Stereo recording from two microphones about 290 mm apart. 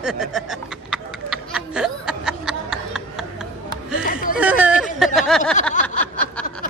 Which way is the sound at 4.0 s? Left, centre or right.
Left.